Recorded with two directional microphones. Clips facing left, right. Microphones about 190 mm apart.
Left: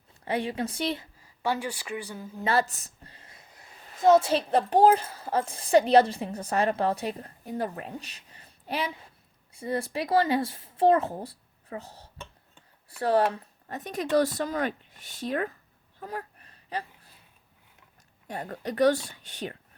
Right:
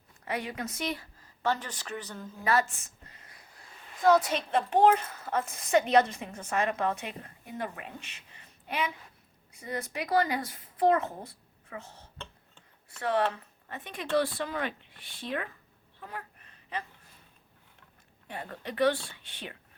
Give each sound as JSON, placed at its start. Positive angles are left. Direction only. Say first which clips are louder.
{"t": 0.3, "sound": "speech", "louder": "left 5 dB", "side_deg": 30}
{"t": 1.2, "sound": "speech", "louder": "left 1 dB", "side_deg": 10}
{"t": 2.4, "sound": "a sound", "louder": "left 2 dB", "side_deg": 30}
{"t": 4.0, "sound": "a woman's voice", "louder": "left 4 dB", "side_deg": 25}
{"t": 16.0, "sound": "a sound", "louder": "left 6 dB", "side_deg": 40}
{"t": 18.3, "sound": "a woman's voice", "louder": "left 5 dB", "side_deg": 40}